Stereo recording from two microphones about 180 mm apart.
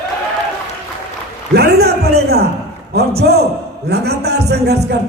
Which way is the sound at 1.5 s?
65° right (ahead or behind).